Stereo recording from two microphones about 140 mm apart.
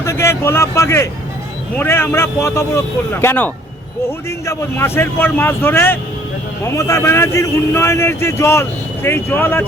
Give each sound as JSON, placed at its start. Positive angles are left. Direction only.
{"t": 0.0, "sound": "a man's voice", "side_deg": 20}